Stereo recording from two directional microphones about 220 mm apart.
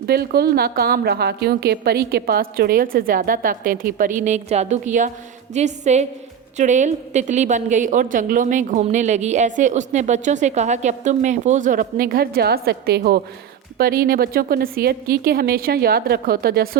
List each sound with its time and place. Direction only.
0.1 s a woman's voice: 45° right (ahead or behind)